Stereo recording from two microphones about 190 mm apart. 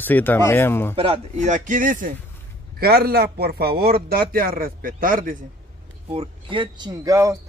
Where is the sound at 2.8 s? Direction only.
55° right (ahead or behind).